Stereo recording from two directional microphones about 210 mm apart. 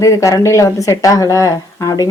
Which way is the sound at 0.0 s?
15° left (ahead or behind).